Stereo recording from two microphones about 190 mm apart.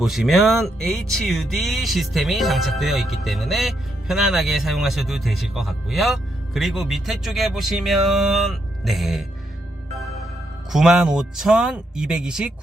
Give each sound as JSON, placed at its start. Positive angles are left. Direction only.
{"t": 0.0, "sound": "speech", "side_deg": 0}
{"t": 10.7, "sound": "speech", "side_deg": -5}